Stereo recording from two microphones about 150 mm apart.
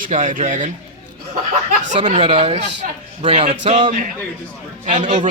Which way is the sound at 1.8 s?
55° right (ahead or behind).